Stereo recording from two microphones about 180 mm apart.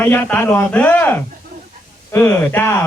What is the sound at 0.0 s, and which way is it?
Speech, 10° left (ahead or behind).